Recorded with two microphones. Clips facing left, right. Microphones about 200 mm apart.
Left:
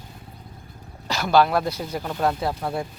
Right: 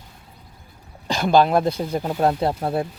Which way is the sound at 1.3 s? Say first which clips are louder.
Right 2 dB; 20° right (ahead or behind).